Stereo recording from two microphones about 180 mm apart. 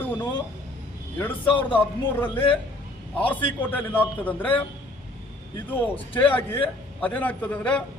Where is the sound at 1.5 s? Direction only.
10° left (ahead or behind).